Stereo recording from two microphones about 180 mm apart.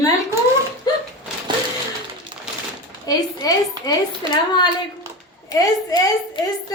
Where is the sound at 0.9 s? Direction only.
20° left (ahead or behind).